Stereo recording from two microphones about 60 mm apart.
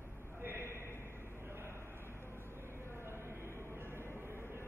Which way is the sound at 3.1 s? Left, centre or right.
Right.